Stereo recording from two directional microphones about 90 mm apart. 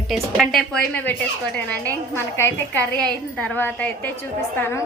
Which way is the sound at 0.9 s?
20° left (ahead or behind).